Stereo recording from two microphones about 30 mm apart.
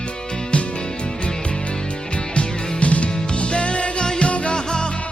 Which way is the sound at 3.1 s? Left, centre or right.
Left.